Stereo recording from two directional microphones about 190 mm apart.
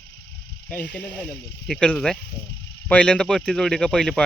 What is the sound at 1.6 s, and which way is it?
Speech, 5° left (ahead or behind).